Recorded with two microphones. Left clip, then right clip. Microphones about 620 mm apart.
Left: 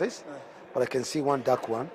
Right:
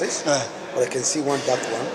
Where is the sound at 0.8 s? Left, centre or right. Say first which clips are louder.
Right 4 dB; left.